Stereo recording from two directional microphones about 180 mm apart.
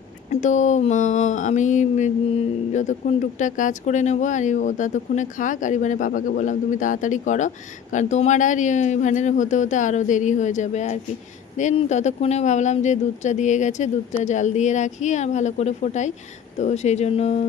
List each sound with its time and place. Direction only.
0.3 s speech: 45° left (ahead or behind)